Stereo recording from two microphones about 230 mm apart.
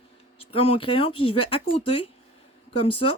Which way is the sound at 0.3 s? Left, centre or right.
Left.